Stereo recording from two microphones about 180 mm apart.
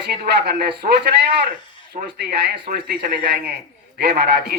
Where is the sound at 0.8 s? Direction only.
45° right (ahead or behind).